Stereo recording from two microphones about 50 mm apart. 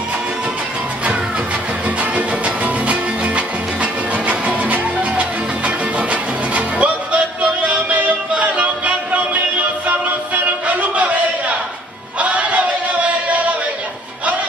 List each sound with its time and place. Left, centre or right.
1.9 s music: right
10.7 s a sound: right
12.2 s chant: right